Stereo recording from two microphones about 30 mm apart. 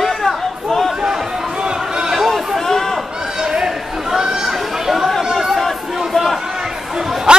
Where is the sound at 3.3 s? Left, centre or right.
Right.